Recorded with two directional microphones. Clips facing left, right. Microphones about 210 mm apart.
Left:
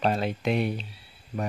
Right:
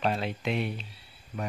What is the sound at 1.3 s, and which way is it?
Speech, 30° left (ahead or behind).